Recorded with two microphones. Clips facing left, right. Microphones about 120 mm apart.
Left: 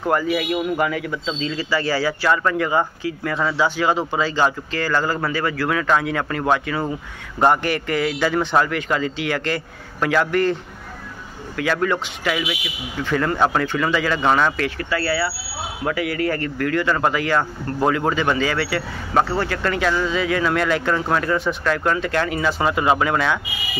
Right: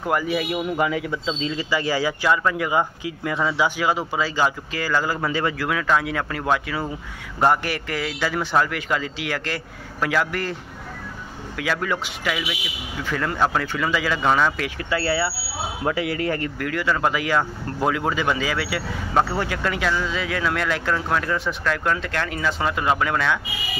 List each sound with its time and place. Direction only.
0.0 s a man's voice: 10° right (ahead or behind)
5.7 s speech: centre (ahead or behind)
14.8 s a man's voice: 20° right (ahead or behind); by 23.4 s 5° left (ahead or behind)